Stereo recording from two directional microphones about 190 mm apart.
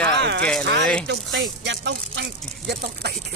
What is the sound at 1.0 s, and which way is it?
Speech, 80° right.